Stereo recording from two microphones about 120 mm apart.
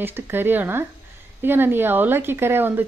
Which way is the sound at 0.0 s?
20° right (ahead or behind).